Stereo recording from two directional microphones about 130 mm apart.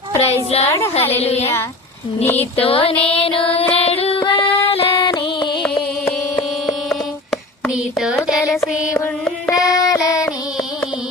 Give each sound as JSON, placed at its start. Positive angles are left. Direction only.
{"t": 0.2, "sound": "a woman's voice", "side_deg": 55}
{"t": 1.2, "sound": "music", "side_deg": 50}
{"t": 7.7, "sound": "a sound", "side_deg": -5}
{"t": 8.4, "sound": "music", "side_deg": 0}
{"t": 9.6, "sound": "child singing", "side_deg": 25}